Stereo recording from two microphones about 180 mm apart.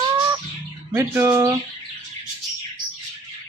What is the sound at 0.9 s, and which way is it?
Speech, 15° right (ahead or behind).